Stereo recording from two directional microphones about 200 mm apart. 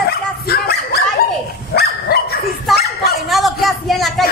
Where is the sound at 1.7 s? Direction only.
50° left (ahead or behind).